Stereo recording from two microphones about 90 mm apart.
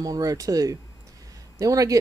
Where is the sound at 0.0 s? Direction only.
40° right (ahead or behind).